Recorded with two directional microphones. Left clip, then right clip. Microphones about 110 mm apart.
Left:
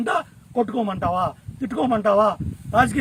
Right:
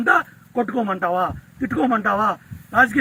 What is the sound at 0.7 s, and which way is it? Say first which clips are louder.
A man's voice: right 2 dB; 45° left (ahead or behind).